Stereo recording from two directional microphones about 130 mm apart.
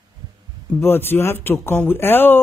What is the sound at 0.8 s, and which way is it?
A man's voice, 15° left (ahead or behind).